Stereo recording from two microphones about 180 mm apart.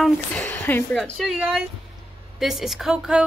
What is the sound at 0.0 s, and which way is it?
A woman's voice, 5° left (ahead or behind).